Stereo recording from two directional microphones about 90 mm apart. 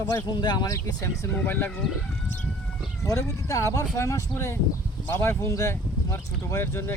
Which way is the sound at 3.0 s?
35° left (ahead or behind).